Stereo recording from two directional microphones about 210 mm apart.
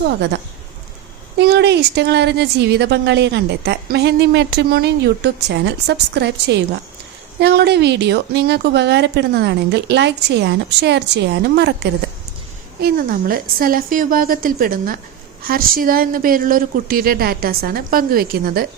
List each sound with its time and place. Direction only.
0.0 s a woman's voice: 55° right (ahead or behind)
1.4 s a woman's voice: 55° right (ahead or behind)